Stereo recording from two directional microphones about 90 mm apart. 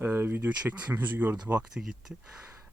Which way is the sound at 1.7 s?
5° right (ahead or behind).